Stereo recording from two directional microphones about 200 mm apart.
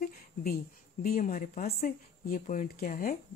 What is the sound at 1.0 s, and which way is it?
Speech, 45° left (ahead or behind).